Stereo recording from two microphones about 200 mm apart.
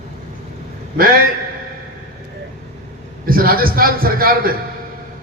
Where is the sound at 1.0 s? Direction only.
45° right (ahead or behind).